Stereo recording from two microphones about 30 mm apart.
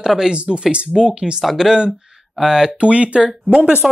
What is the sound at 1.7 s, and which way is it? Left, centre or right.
Speech, centre.